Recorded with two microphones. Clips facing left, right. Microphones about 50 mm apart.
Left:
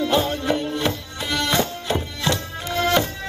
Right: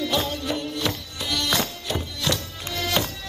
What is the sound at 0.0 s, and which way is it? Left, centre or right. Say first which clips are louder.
Music: left 5 dB; left.